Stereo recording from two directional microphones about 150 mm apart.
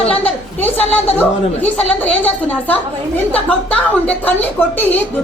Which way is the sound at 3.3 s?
10° left (ahead or behind).